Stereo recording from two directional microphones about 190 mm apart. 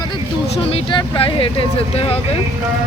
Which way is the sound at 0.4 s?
30° left (ahead or behind).